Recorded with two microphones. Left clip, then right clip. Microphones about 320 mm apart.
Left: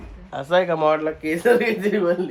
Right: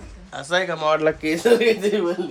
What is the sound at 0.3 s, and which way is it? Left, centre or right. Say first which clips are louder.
Speech: left 3 dB; centre.